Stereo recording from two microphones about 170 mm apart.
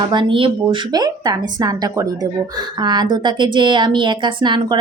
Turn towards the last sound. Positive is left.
turn(degrees=-25)  # may be behind; listen again after turning